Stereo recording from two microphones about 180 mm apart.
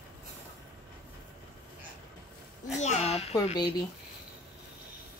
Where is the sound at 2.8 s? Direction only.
35° left (ahead or behind).